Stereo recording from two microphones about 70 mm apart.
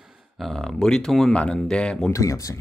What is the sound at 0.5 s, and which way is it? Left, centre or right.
Speech, centre.